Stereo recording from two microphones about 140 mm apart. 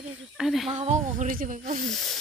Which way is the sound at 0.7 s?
55° right (ahead or behind).